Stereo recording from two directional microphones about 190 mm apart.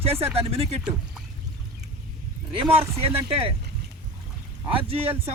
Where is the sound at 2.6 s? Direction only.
10° right (ahead or behind).